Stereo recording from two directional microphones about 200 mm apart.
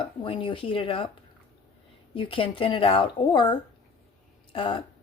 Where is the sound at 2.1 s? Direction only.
25° left (ahead or behind).